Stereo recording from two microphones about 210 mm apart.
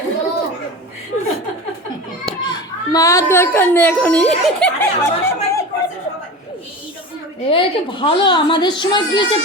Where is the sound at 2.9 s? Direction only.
15° left (ahead or behind).